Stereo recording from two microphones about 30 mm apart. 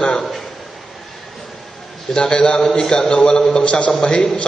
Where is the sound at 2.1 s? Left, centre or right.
Left.